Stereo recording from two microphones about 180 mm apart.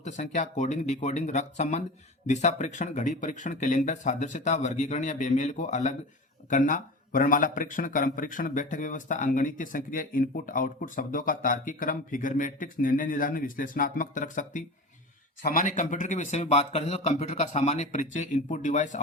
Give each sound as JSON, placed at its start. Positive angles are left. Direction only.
{"t": 0.0, "sound": "a man's voice", "side_deg": 40}